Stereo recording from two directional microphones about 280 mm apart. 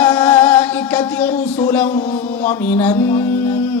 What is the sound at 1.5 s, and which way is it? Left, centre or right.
Speech, centre.